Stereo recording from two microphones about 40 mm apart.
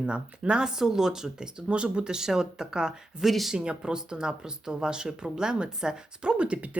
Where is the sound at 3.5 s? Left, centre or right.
Right.